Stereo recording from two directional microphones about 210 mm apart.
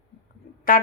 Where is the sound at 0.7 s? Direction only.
40° left (ahead or behind).